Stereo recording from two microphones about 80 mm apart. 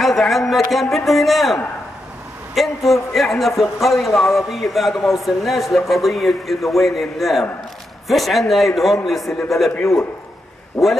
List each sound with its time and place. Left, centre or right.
0.0 s a man's voice: centre
10.8 s a man's voice: centre